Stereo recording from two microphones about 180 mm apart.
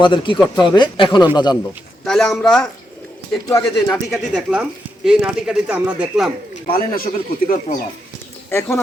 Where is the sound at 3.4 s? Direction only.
20° left (ahead or behind).